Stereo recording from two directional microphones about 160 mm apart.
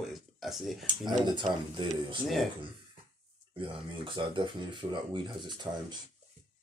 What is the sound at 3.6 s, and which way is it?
Speech, 30° right (ahead or behind).